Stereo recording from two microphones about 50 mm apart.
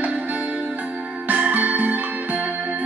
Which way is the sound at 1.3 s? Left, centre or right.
Right.